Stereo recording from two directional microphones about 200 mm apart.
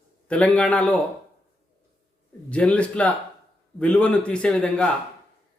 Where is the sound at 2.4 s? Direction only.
5° left (ahead or behind).